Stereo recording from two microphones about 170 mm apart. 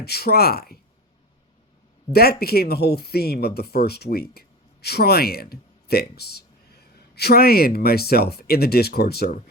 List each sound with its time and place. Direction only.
0.0 s speech: 70° left (ahead or behind)
2.1 s speech: 65° left (ahead or behind)